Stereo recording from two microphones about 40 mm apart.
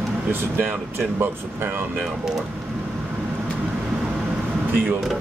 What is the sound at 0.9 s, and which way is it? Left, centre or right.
Speech, right.